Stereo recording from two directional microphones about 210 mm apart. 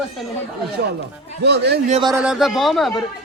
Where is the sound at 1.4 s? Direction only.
50° right (ahead or behind).